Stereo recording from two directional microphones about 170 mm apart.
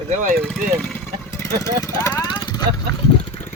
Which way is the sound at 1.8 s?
20° left (ahead or behind).